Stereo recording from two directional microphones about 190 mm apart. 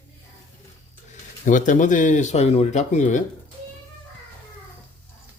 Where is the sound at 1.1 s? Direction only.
40° left (ahead or behind).